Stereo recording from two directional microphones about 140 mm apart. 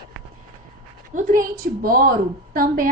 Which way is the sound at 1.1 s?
70° right (ahead or behind).